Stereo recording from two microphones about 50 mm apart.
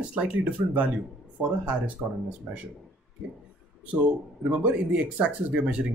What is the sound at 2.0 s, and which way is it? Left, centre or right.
Speech, centre.